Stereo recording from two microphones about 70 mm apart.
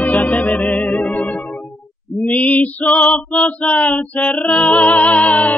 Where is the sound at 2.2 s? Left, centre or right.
Left.